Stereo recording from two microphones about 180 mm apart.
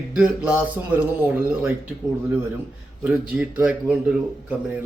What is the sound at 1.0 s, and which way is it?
Speech, 10° right (ahead or behind).